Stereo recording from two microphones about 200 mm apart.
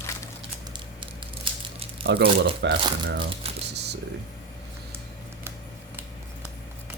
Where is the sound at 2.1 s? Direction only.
60° right (ahead or behind).